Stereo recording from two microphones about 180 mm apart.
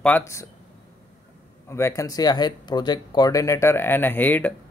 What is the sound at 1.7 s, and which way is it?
Speech, 15° left (ahead or behind).